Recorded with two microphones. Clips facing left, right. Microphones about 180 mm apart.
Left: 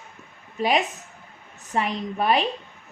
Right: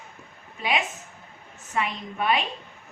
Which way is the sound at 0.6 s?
40° left (ahead or behind).